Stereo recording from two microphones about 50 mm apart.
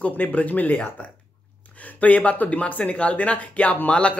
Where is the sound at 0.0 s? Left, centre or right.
Left.